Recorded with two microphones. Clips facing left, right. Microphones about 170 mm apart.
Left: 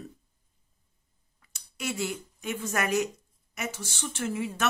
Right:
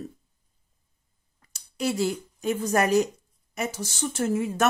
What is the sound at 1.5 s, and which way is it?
Speech, 35° right (ahead or behind).